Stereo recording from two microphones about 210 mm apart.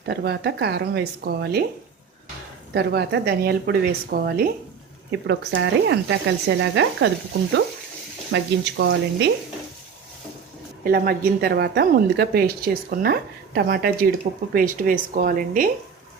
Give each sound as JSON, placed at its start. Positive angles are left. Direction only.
{"t": 0.0, "sound": "a woman's voice", "side_deg": -50}
{"t": 2.7, "sound": "a woman's voice", "side_deg": -50}
{"t": 5.3, "sound": "speech", "side_deg": -55}
{"t": 8.3, "sound": "speech", "side_deg": -60}
{"t": 10.9, "sound": "a woman's voice", "side_deg": -45}